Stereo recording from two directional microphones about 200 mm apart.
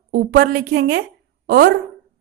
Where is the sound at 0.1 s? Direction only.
50° right (ahead or behind).